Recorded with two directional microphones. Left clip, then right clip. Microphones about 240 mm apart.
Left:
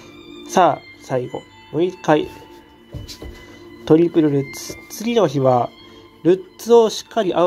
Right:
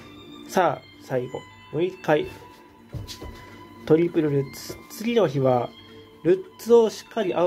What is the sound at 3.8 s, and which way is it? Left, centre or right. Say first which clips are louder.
Speech: left 6 dB; centre.